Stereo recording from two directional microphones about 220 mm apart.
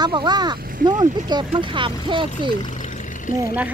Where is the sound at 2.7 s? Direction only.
35° left (ahead or behind).